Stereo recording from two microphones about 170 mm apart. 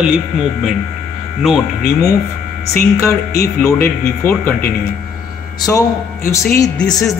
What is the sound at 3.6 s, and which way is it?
A woman's voice, 10° left (ahead or behind).